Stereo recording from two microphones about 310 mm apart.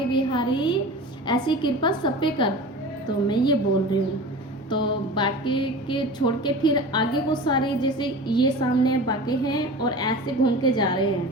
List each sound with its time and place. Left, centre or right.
0.1 s a woman's voice: centre
4.7 s a woman's voice: centre